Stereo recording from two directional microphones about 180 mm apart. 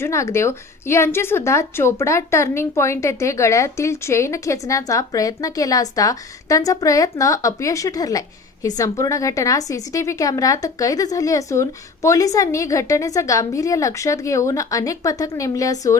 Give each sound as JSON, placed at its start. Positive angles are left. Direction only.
{"t": 0.0, "sound": "a woman's voice", "side_deg": 15}